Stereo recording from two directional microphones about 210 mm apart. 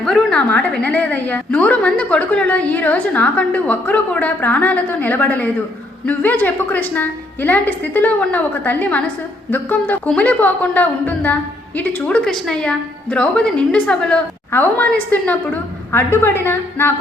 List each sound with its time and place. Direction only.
0.0 s a woman's voice: centre (ahead or behind)